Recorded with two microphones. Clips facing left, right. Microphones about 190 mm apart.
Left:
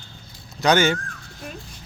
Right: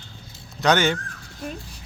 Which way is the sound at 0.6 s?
Centre (ahead or behind).